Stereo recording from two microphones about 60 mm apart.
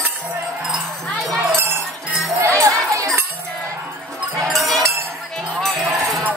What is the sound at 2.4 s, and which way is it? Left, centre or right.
Music, right.